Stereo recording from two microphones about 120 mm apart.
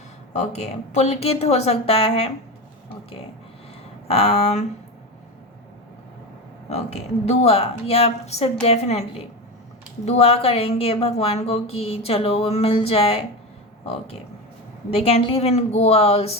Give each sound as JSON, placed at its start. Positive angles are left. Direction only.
{"t": 0.3, "sound": "speech", "side_deg": 65}
{"t": 4.1, "sound": "speech", "side_deg": 60}
{"t": 6.7, "sound": "speech", "side_deg": 65}
{"t": 10.1, "sound": "a woman's voice", "side_deg": 55}